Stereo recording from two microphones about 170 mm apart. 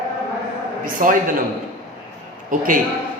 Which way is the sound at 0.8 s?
50° right (ahead or behind).